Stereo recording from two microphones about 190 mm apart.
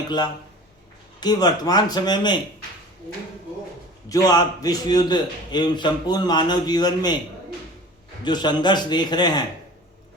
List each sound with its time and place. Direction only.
1.2 s a man's voice: 20° left (ahead or behind)
4.1 s a man's voice: 20° left (ahead or behind)
8.2 s a man's voice: 25° left (ahead or behind)